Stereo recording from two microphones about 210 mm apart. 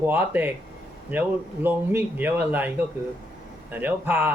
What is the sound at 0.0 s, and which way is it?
Speech, 10° right (ahead or behind).